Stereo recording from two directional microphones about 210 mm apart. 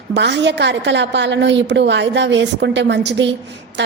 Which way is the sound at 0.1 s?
55° right (ahead or behind).